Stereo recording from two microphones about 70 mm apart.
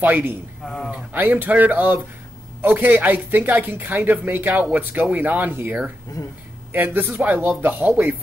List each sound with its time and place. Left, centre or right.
0.0 s speech: right
0.6 s speech: centre
0.9 s speech: right